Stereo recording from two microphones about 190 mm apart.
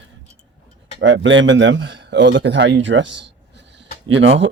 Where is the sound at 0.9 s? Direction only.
75° right (ahead or behind).